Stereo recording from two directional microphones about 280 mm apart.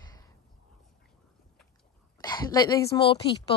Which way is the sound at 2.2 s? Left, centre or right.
Centre.